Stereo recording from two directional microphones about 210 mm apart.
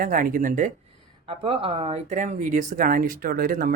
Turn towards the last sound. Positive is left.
turn(degrees=-45)  # may be behind; listen again after turning